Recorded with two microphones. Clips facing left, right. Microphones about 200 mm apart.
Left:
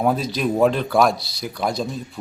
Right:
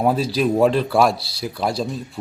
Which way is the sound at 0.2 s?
30° right (ahead or behind).